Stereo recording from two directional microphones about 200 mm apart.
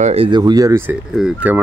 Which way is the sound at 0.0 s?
30° right (ahead or behind).